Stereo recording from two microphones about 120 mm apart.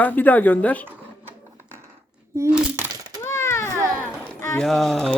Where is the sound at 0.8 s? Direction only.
15° right (ahead or behind).